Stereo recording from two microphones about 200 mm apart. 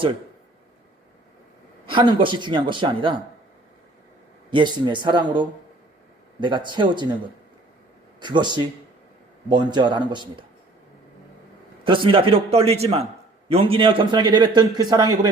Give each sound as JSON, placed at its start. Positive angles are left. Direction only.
{"t": 1.9, "sound": "a man's voice", "side_deg": -25}
{"t": 4.5, "sound": "a man's voice", "side_deg": -25}
{"t": 8.2, "sound": "a man's voice", "side_deg": -20}
{"t": 11.9, "sound": "a man's voice", "side_deg": -25}